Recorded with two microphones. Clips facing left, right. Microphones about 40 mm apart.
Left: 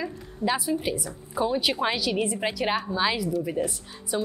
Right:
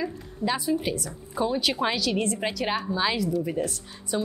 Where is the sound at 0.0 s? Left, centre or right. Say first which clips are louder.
Even; centre.